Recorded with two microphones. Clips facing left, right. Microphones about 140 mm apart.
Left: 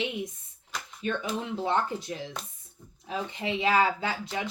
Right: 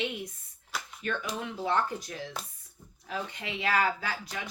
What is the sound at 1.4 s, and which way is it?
A woman's voice, 25° left (ahead or behind).